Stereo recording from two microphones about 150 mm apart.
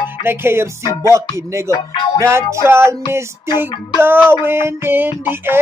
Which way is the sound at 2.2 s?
20° right (ahead or behind).